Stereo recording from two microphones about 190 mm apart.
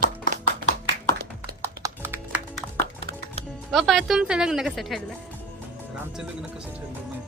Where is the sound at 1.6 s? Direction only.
15° right (ahead or behind).